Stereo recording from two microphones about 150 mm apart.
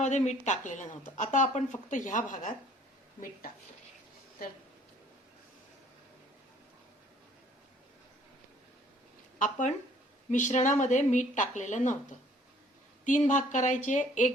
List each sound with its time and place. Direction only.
0.0 s speech: 50° left (ahead or behind)
9.4 s speech: 55° left (ahead or behind)
13.1 s speech: 55° left (ahead or behind)